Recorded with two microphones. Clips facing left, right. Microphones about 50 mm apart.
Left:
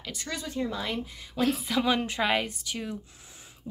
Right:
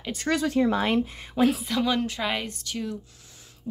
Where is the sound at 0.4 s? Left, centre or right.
Right.